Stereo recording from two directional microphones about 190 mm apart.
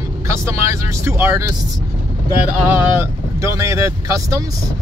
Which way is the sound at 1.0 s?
15° right (ahead or behind).